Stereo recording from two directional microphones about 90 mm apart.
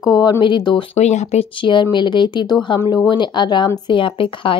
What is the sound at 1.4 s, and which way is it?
Speech, 65° left (ahead or behind).